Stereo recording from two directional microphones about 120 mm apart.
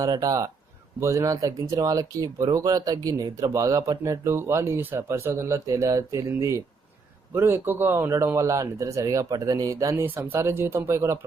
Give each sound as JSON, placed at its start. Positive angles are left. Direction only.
{"t": 0.0, "sound": "speech", "side_deg": -30}
{"t": 9.9, "sound": "speech", "side_deg": -15}